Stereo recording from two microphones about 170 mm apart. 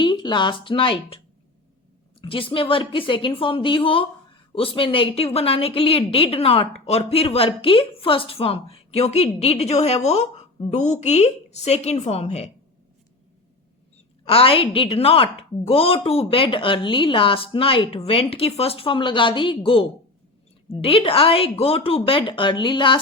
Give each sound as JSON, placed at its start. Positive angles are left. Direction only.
{"t": 0.0, "sound": "a woman's voice", "side_deg": 25}
{"t": 2.2, "sound": "a woman's voice", "side_deg": 30}
{"t": 14.3, "sound": "a woman's voice", "side_deg": 35}